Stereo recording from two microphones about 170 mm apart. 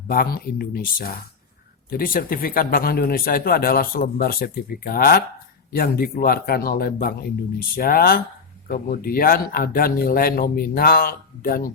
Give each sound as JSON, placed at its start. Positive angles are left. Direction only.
{"t": 0.1, "sound": "speech", "side_deg": 60}